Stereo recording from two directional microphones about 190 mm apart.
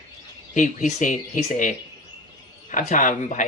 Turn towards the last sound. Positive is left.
turn(degrees=40)  # may be behind; listen again after turning